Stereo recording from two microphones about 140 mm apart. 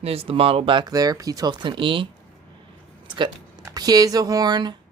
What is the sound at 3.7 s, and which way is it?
Speech, 25° right (ahead or behind).